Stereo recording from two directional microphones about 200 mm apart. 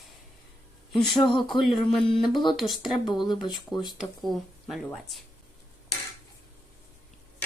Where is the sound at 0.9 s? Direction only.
Centre (ahead or behind).